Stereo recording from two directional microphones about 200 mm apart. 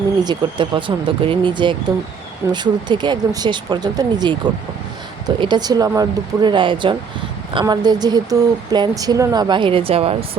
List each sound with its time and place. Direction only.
0.3 s speech: 25° right (ahead or behind)